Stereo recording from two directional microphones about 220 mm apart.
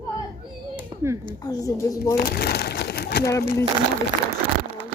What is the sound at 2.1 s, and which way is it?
Crumpling, 45° left (ahead or behind).